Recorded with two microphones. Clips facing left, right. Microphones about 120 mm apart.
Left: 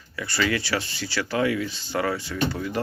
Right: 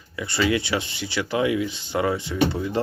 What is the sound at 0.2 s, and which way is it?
Speech, 20° right (ahead or behind).